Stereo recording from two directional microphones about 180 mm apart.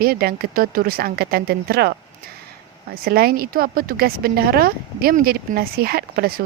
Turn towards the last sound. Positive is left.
turn(degrees=-60)  # may be behind; listen again after turning